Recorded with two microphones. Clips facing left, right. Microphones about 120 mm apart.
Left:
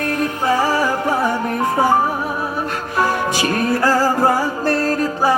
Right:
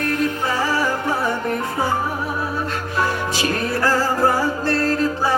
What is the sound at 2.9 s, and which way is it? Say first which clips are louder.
Music: left 4 dB; 20° left (ahead or behind).